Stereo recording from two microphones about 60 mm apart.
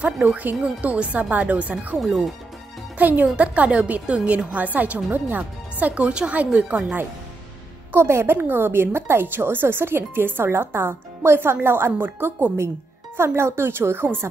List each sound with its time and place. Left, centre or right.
0.0 s a woman's voice: right
0.6 s a woman's voice: centre
3.0 s a woman's voice: right
7.9 s a woman's voice: right